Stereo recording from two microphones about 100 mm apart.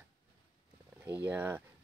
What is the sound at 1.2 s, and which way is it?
Speech, 20° right (ahead or behind).